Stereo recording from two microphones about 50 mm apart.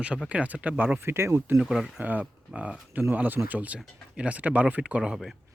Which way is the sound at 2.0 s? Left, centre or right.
Right.